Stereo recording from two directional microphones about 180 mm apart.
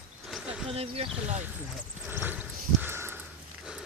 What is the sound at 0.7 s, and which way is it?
Speech, 35° right (ahead or behind).